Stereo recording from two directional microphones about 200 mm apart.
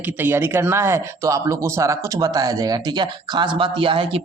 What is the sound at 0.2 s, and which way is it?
Speech, 10° right (ahead or behind).